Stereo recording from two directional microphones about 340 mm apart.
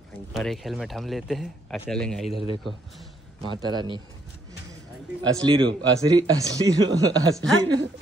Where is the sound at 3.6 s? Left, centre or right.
Centre.